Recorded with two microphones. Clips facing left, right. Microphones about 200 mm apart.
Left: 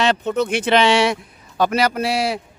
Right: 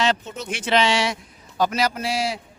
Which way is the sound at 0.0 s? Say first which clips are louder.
Left 6 dB; 60° left (ahead or behind).